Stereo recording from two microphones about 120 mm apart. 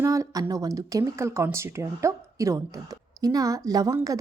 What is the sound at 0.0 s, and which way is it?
Speech, 25° right (ahead or behind).